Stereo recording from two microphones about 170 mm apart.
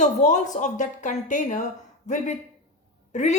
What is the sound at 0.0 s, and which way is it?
A woman's voice, 45° left (ahead or behind).